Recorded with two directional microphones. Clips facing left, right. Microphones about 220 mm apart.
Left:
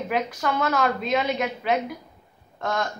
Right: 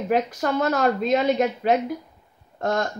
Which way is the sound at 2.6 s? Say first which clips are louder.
Right 3 dB; 45° right (ahead or behind).